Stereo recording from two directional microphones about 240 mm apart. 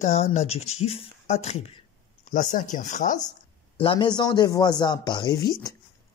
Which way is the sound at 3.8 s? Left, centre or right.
Centre.